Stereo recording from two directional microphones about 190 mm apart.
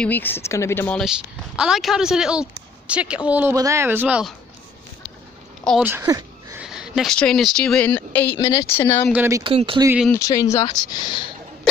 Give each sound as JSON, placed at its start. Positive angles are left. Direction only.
{"t": 0.0, "sound": "speech", "side_deg": 10}
{"t": 1.6, "sound": "speech", "side_deg": 0}
{"t": 5.6, "sound": "speech", "side_deg": 5}
{"t": 5.9, "sound": "a sound", "side_deg": -15}
{"t": 6.6, "sound": "speech", "side_deg": -5}
{"t": 9.1, "sound": "speech", "side_deg": -10}
{"t": 9.4, "sound": "speech", "side_deg": -30}
{"t": 10.1, "sound": "speech", "side_deg": 15}